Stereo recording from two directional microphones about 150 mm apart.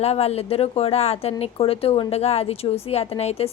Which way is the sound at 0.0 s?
45° left (ahead or behind).